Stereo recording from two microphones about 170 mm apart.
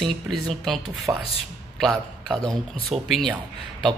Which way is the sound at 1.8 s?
Centre (ahead or behind).